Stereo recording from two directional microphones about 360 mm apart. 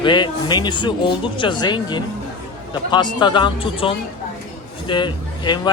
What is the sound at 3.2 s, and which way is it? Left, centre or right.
Speech, centre.